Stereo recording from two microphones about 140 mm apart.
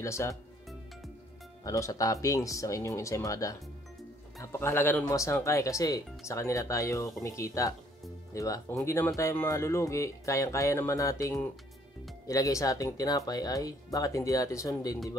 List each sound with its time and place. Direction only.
0.0 s speech: 20° left (ahead or behind)
1.6 s speech: 25° left (ahead or behind)